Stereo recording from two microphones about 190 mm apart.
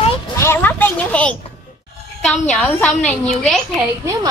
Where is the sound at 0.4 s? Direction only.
10° left (ahead or behind).